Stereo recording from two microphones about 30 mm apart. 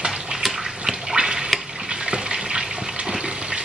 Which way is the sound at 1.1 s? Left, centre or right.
Right.